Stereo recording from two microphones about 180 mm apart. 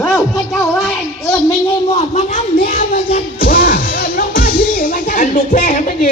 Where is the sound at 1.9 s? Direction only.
40° left (ahead or behind).